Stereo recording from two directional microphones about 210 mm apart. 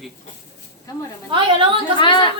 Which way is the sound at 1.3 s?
25° right (ahead or behind).